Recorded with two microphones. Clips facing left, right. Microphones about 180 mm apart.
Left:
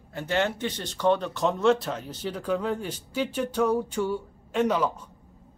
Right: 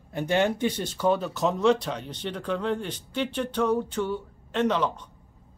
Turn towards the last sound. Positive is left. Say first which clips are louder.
# even
turn(degrees=10)  # may be behind; listen again after turning